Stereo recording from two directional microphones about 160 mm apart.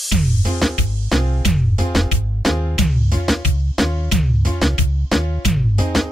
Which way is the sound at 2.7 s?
Centre (ahead or behind).